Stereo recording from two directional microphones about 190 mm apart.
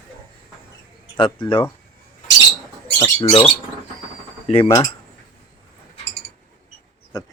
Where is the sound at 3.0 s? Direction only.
25° left (ahead or behind).